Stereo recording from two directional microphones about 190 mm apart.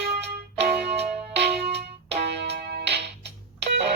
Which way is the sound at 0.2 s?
65° right (ahead or behind).